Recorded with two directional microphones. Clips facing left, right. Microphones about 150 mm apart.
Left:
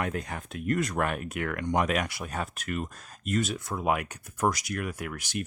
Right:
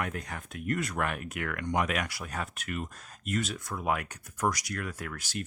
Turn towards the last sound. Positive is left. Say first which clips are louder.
# left 3 dB
turn(degrees=20)  # may be behind; listen again after turning